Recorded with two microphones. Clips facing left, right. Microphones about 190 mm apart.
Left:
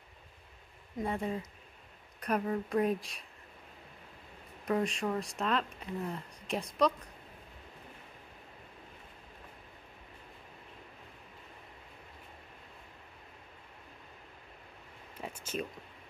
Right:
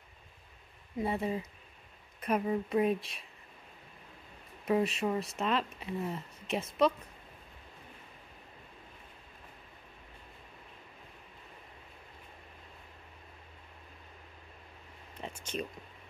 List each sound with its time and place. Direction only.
0.9 s speech: 5° right (ahead or behind)
4.6 s speech: 5° right (ahead or behind)
15.5 s speech: 5° left (ahead or behind)